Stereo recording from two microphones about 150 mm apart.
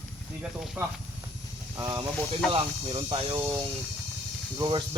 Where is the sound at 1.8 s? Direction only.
25° right (ahead or behind).